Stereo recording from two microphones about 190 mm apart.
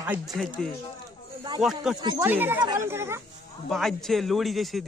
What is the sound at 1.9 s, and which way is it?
Speech, 25° right (ahead or behind).